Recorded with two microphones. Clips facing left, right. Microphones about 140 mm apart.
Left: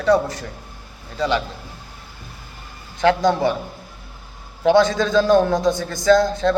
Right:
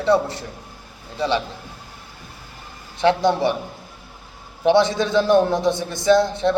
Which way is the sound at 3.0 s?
25° right (ahead or behind).